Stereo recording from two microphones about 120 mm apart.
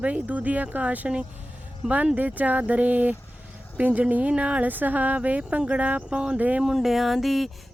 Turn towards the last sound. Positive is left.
turn(degrees=0)  # may be behind; listen again after turning